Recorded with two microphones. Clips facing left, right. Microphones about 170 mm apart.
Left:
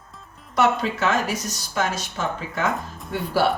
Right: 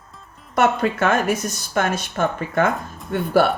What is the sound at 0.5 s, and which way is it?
Speech, 55° right (ahead or behind).